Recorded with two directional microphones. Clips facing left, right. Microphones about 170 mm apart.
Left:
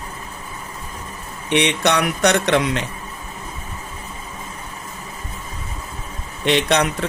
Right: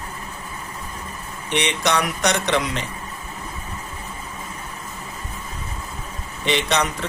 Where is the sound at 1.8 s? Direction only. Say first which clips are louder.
Left 4 dB; 60° left (ahead or behind).